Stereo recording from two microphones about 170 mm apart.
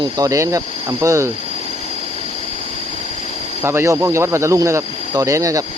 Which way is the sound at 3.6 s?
15° right (ahead or behind).